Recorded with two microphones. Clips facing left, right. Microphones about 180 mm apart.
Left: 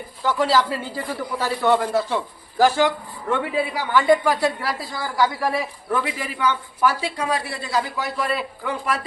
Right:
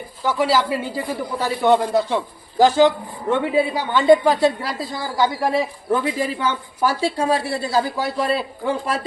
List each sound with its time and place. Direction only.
0.3 s speech: 10° right (ahead or behind); by 9.0 s 30° right (ahead or behind)